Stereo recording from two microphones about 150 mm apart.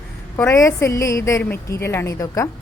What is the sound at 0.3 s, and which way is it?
A woman's voice, 20° left (ahead or behind).